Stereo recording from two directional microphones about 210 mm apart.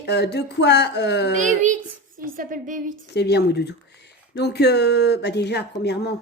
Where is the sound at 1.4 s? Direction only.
35° right (ahead or behind).